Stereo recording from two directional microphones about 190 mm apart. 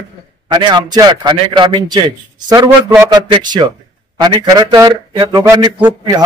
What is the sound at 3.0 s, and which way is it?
A man's voice, 20° right (ahead or behind).